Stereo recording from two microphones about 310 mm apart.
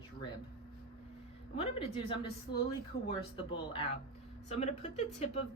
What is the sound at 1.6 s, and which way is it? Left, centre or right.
A woman's voice, centre.